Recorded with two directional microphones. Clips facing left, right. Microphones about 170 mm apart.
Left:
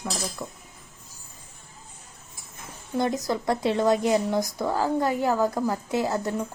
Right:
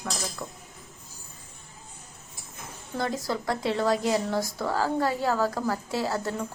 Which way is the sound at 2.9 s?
20° left (ahead or behind).